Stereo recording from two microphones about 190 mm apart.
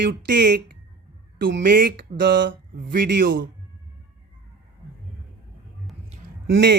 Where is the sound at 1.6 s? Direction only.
50° right (ahead or behind).